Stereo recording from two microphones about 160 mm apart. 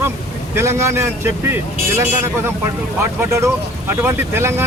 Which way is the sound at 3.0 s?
20° right (ahead or behind).